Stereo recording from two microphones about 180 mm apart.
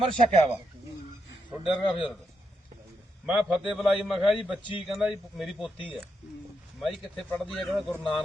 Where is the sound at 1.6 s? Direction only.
25° left (ahead or behind).